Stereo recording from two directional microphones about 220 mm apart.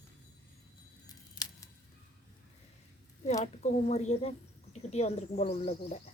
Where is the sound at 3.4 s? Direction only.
30° left (ahead or behind).